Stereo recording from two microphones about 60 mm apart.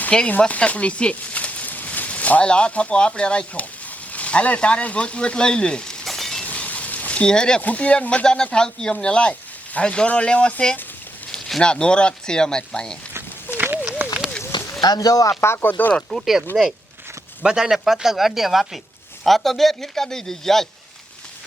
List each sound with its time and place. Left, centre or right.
0.3 s speech: left
6.1 s a sound: centre
6.4 s a sound: left
7.6 s speech: left
13.5 s a sound: left
14.8 s speech: left
15.3 s speech: left
16.0 s a man's voice: centre
17.4 s a man's voice: centre